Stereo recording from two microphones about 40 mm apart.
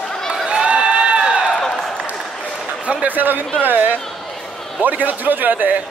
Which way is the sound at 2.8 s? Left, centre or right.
Right.